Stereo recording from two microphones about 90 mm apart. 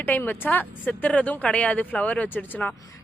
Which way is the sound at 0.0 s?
20° left (ahead or behind).